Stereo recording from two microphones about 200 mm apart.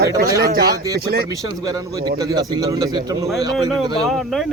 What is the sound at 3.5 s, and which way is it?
Speech, centre (ahead or behind).